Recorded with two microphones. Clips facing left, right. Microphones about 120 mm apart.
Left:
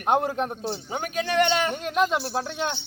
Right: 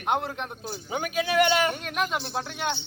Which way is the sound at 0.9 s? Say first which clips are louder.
Right 1 dB; 5° right (ahead or behind).